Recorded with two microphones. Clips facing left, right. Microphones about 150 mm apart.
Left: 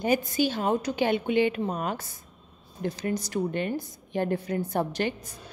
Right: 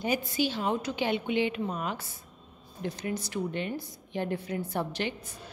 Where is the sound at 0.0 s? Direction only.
45° left (ahead or behind).